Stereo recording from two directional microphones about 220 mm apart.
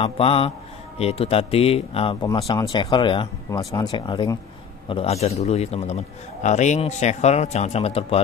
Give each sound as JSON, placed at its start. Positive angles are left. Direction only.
{"t": 0.0, "sound": "a man's voice", "side_deg": 25}